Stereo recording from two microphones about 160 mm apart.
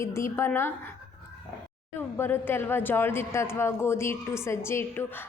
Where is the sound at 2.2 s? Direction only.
15° left (ahead or behind).